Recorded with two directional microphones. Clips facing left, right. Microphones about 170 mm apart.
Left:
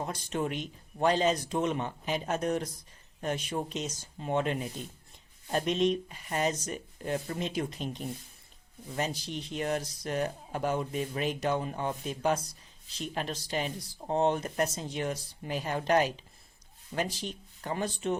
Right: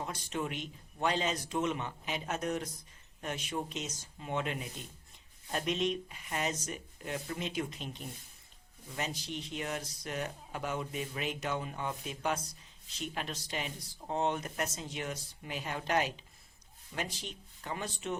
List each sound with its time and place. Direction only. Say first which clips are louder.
0.0 s speech: left 4 dB; 40° left (ahead or behind)